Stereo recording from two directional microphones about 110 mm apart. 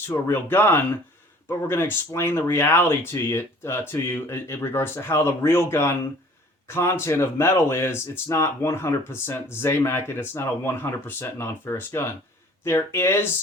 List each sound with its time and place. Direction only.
0.3 s speech: 20° left (ahead or behind)